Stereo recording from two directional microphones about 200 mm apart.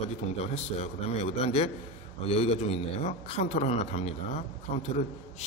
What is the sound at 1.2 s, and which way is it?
A man's voice, 30° left (ahead or behind).